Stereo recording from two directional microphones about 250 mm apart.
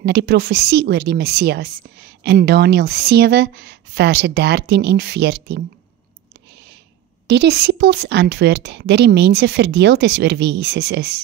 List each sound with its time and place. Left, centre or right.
0.0 s a woman's voice: right
7.2 s a woman's voice: right